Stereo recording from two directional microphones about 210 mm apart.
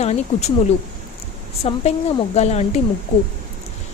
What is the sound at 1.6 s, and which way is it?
Speech, 30° left (ahead or behind).